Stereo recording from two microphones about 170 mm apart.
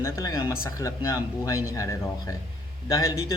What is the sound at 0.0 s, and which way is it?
Speech, 20° left (ahead or behind).